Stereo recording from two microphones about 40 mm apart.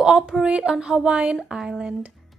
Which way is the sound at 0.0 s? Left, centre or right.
Centre.